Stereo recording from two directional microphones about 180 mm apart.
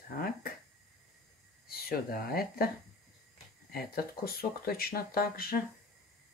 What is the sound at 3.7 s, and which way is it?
Speech, 55° left (ahead or behind).